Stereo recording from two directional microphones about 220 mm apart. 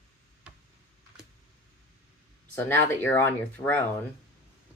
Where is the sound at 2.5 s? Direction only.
10° left (ahead or behind).